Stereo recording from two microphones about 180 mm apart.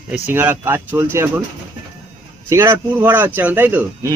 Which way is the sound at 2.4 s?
15° right (ahead or behind).